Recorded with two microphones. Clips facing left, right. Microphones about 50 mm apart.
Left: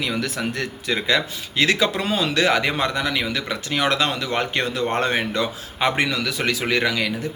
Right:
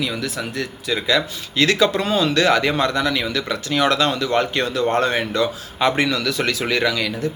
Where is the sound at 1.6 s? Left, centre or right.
Centre.